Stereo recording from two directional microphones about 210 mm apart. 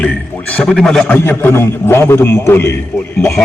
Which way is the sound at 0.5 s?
5° left (ahead or behind).